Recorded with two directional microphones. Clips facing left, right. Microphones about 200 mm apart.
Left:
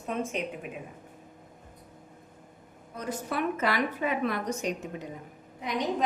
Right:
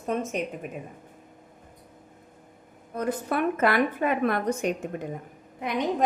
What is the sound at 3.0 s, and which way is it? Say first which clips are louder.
A woman's voice: right 5 dB; 55° right (ahead or behind).